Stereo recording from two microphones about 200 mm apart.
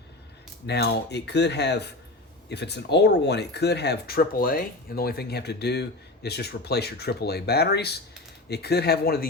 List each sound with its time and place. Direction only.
0.7 s speech: 55° left (ahead or behind)